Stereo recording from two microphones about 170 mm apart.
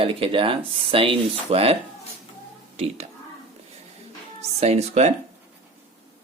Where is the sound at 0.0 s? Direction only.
35° right (ahead or behind).